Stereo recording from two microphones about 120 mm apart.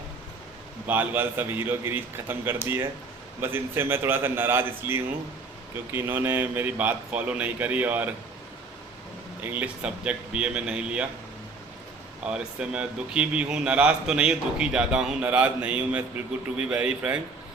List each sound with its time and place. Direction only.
0.9 s a man's voice: 15° right (ahead or behind)
9.4 s speech: 15° right (ahead or behind)
12.2 s speech: 10° right (ahead or behind)